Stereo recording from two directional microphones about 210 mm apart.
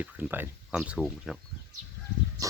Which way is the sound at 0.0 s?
10° right (ahead or behind).